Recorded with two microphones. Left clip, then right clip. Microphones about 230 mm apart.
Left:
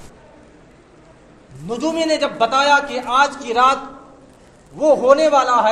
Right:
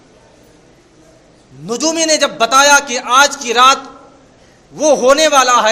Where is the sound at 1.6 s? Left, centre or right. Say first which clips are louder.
Right 5 dB; right.